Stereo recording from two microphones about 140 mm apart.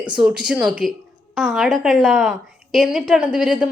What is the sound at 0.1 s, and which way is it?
A woman's voice, 5° right (ahead or behind).